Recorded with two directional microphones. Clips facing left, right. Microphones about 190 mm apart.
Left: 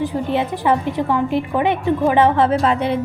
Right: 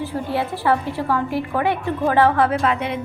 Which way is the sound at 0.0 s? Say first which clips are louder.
Left 4 dB; 20° left (ahead or behind).